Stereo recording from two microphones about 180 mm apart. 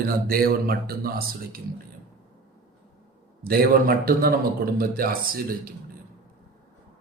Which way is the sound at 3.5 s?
55° right (ahead or behind).